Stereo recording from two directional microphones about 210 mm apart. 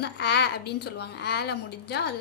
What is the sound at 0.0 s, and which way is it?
A woman's voice, 50° left (ahead or behind).